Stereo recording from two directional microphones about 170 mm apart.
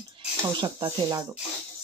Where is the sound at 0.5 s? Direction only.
25° right (ahead or behind).